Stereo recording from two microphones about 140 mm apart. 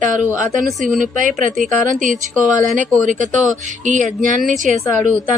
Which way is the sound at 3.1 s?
65° right (ahead or behind).